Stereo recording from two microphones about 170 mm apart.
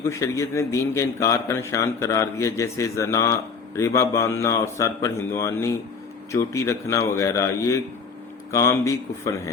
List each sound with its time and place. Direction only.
0.0 s speech: 15° left (ahead or behind)